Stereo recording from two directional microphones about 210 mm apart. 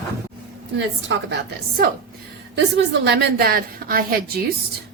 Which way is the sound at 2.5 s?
55° right (ahead or behind).